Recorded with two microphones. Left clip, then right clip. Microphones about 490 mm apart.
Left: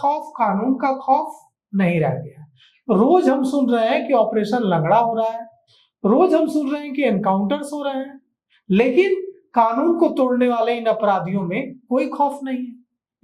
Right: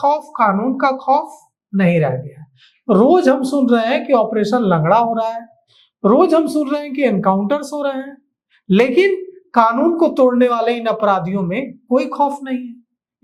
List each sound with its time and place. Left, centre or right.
0.0 s a woman's voice: right